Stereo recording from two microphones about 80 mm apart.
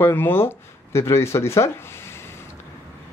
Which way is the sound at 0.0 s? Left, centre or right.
Left.